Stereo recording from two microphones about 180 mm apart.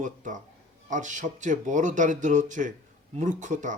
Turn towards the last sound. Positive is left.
turn(degrees=-45)  # may be behind; listen again after turning